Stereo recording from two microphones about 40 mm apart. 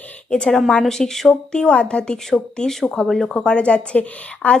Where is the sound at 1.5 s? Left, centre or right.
Left.